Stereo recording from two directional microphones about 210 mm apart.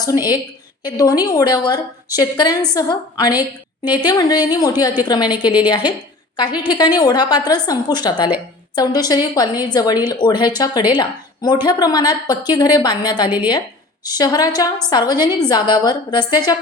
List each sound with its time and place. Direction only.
0.0 s a woman's voice: 20° left (ahead or behind)